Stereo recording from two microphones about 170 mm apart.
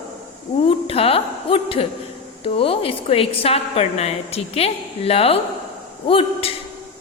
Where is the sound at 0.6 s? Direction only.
35° left (ahead or behind).